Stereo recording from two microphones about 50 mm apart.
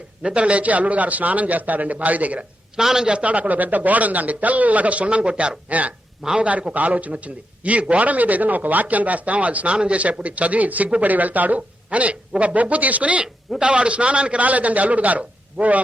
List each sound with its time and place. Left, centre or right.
0.2 s a man's voice: right
2.7 s a man's voice: centre
3.1 s a man's voice: right